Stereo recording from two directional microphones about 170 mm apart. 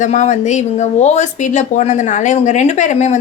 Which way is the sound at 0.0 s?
45° left (ahead or behind).